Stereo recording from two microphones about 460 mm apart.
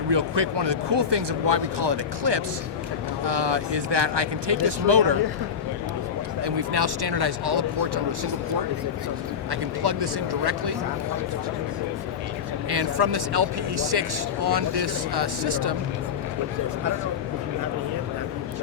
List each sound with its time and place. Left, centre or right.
0.1 s speech: right
6.4 s speech: right
9.5 s speech: right
12.7 s speech: right